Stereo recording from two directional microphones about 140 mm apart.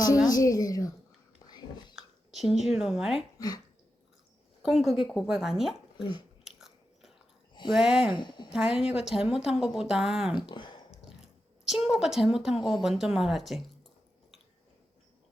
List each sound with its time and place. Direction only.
0.3 s a woman's voice: 25° left (ahead or behind)
1.4 s whispering: 25° left (ahead or behind)
2.0 s speech: centre (ahead or behind)
3.3 s speech: 25° left (ahead or behind)
4.6 s a woman's voice: centre (ahead or behind)
6.0 s a woman's voice: 35° left (ahead or behind)
6.4 s biting: centre (ahead or behind)
7.7 s a woman's voice: 5° right (ahead or behind)
8.1 s a woman's voice: 35° left (ahead or behind)
8.5 s a woman's voice: 5° right (ahead or behind)
10.5 s speech: 35° left (ahead or behind)
10.9 s speech: 5° right (ahead or behind)